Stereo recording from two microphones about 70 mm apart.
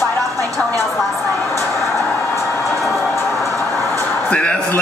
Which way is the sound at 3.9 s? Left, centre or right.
Centre.